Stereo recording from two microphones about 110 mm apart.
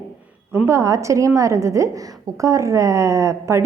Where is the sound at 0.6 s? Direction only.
30° right (ahead or behind).